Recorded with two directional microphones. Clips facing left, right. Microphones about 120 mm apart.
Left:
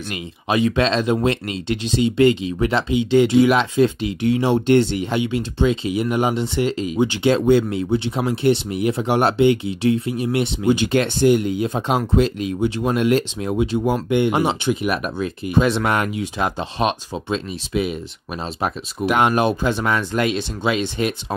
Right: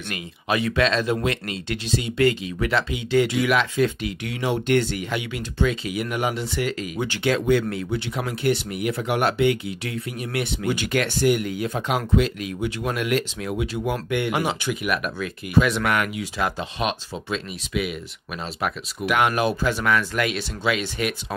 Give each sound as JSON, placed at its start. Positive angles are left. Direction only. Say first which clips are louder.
{"t": 0.1, "sound": "speech", "louder": "left 3 dB", "side_deg": 20}